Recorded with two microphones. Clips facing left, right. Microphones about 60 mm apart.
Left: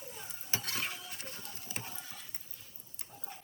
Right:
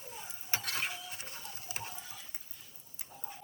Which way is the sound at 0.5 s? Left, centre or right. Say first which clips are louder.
Right 2 dB; right.